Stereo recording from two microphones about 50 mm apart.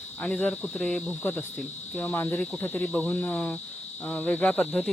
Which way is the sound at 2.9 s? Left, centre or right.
Left.